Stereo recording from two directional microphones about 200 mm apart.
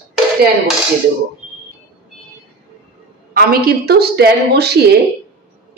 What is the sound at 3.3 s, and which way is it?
A woman's voice, 50° right (ahead or behind).